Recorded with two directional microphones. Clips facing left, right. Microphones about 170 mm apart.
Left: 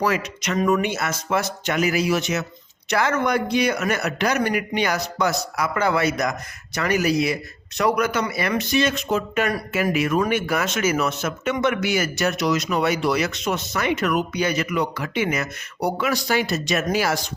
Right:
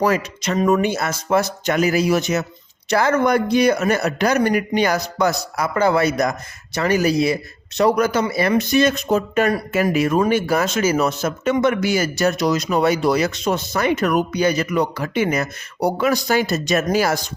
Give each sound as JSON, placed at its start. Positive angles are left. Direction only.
{"t": 0.0, "sound": "speech", "side_deg": -35}